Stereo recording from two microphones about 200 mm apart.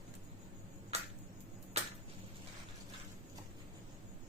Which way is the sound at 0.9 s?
30° right (ahead or behind).